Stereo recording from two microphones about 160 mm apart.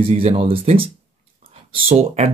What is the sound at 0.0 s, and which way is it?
Speech, 40° right (ahead or behind).